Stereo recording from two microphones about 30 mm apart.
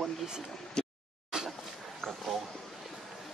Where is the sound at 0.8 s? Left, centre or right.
Left.